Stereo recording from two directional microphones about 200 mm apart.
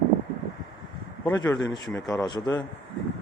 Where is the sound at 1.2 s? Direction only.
15° left (ahead or behind).